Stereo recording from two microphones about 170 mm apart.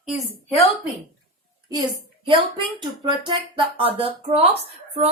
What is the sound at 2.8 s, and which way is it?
Speech, 25° right (ahead or behind).